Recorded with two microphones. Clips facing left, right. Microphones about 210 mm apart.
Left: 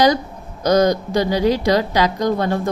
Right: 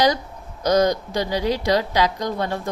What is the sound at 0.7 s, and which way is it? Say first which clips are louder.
A woman's voice: left 3 dB; 45° left (ahead or behind).